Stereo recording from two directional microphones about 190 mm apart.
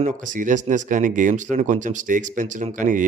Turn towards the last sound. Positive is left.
turn(degrees=-45)  # may be behind; listen again after turning